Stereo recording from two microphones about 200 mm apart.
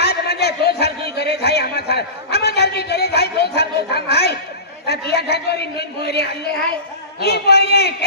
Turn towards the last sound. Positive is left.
turn(degrees=55)  # may be behind; listen again after turning